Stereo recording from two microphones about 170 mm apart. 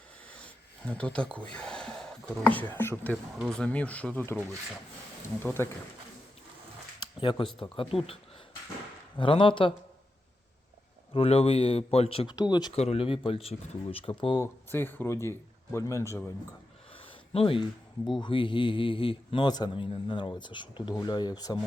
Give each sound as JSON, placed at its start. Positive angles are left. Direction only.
{"t": 0.3, "sound": "speech", "side_deg": 5}
{"t": 3.3, "sound": "speech", "side_deg": 0}
{"t": 7.0, "sound": "a sound", "side_deg": 30}
{"t": 7.6, "sound": "speech", "side_deg": 30}
{"t": 9.1, "sound": "a man's voice", "side_deg": 30}
{"t": 11.1, "sound": "speech", "side_deg": 35}
{"t": 12.7, "sound": "speech", "side_deg": 40}
{"t": 14.4, "sound": "speech", "side_deg": 10}
{"t": 16.9, "sound": "a sound", "side_deg": 35}
{"t": 18.2, "sound": "a man's voice", "side_deg": 30}